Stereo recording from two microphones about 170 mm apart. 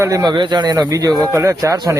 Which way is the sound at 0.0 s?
20° right (ahead or behind).